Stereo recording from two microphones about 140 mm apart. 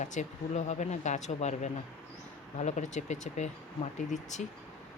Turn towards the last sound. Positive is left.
turn(degrees=55)  # may be behind; listen again after turning